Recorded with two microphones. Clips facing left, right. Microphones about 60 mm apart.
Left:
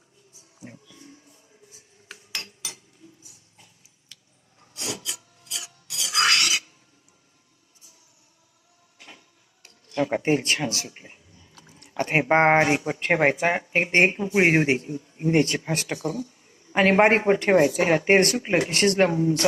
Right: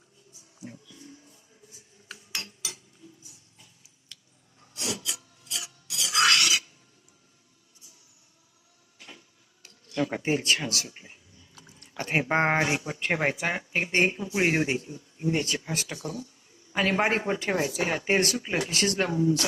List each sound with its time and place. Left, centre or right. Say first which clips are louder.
0.6 s music: even; left
2.4 s chink: even; centre
4.7 s filing: even; left
5.9 s music: even; left
10.2 s speech: left 3 dB; left
11.7 s chewing: left 8 dB; left
12.0 s speech: left 6 dB; left